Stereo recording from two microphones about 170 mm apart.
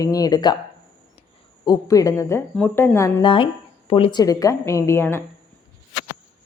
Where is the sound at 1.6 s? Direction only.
20° left (ahead or behind).